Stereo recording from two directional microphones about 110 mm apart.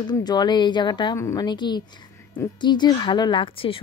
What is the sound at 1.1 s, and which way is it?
Speech, 30° left (ahead or behind).